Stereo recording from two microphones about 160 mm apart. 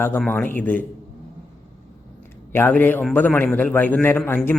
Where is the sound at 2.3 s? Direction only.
15° left (ahead or behind).